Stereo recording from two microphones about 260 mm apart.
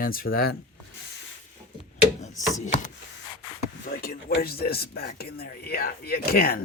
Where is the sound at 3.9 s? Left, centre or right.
Left.